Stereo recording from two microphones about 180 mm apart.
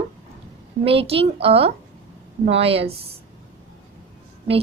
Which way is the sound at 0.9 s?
30° right (ahead or behind).